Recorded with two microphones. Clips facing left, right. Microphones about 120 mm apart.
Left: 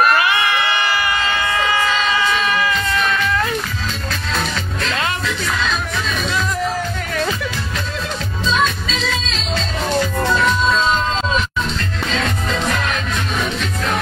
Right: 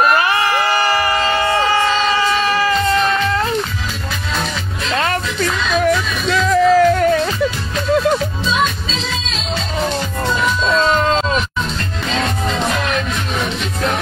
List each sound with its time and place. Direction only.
0.0 s music: 30° right (ahead or behind)
4.9 s music: 40° right (ahead or behind)
6.3 s music: 90° right
10.7 s music: 75° right (ahead or behind)